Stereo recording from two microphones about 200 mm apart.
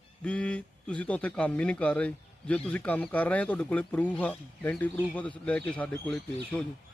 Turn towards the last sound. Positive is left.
turn(degrees=5)  # may be behind; listen again after turning